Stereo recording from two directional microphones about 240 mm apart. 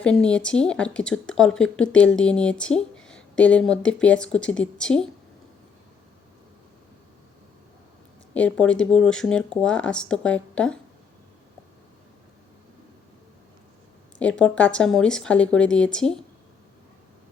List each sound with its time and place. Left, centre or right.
0.0 s speech: centre
8.3 s speech: centre
14.2 s speech: centre